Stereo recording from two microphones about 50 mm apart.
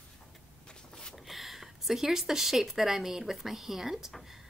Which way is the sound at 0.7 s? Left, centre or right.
Centre.